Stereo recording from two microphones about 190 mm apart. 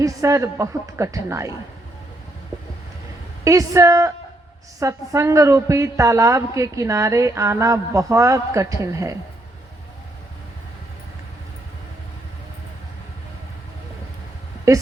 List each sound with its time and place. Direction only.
0.0 s a woman's voice: 15° right (ahead or behind)
3.4 s a woman's voice: 15° right (ahead or behind)
14.7 s a woman's voice: 15° right (ahead or behind)